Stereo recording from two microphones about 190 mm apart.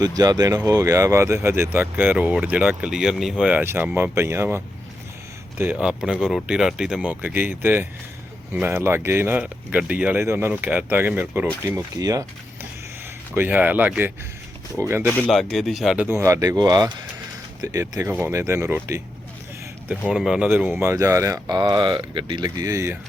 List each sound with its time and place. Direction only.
0.0 s speech: 20° right (ahead or behind)
5.7 s speech: centre (ahead or behind); by 12.2 s 20° right (ahead or behind)
13.3 s speech: 10° right (ahead or behind)
15.1 s speech: 5° left (ahead or behind); by 19.0 s 15° right (ahead or behind)
20.1 s speech: 5° right (ahead or behind)